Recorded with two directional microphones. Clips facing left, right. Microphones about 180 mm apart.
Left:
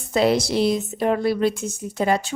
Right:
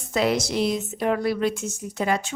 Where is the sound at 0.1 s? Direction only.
30° left (ahead or behind).